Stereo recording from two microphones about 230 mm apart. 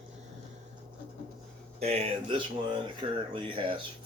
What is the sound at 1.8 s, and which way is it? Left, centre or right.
Speech, right.